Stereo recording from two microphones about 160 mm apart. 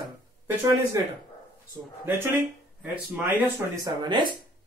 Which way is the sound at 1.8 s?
5° right (ahead or behind).